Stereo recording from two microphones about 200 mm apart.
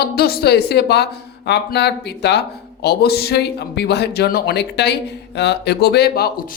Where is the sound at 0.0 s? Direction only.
50° left (ahead or behind).